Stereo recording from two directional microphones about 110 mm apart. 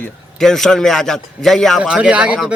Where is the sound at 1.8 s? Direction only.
10° right (ahead or behind).